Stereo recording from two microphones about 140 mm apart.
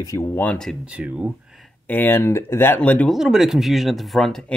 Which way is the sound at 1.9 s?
15° left (ahead or behind).